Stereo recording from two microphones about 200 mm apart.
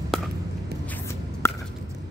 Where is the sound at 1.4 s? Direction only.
10° left (ahead or behind).